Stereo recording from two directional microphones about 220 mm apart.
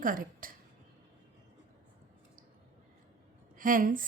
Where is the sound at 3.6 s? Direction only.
40° right (ahead or behind).